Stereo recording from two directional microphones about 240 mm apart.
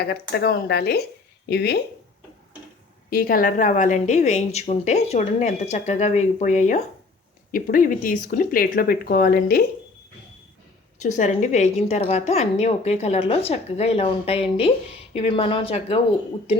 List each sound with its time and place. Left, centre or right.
0.0 s speech: left
3.1 s a woman's voice: left
11.0 s a woman's voice: left